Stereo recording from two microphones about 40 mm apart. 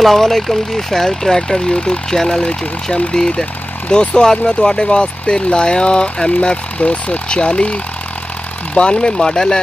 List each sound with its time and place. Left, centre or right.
0.0 s speech: centre